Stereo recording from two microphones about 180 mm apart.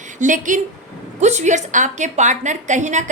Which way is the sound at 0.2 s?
45° right (ahead or behind).